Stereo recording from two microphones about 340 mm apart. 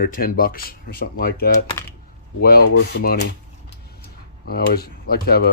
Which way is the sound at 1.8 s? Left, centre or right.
Centre.